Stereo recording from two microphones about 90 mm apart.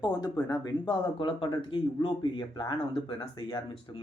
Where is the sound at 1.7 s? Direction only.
65° left (ahead or behind).